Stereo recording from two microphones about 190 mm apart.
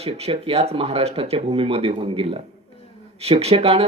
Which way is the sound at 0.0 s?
30° right (ahead or behind).